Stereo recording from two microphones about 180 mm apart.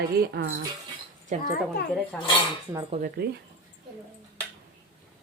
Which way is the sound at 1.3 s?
40° right (ahead or behind).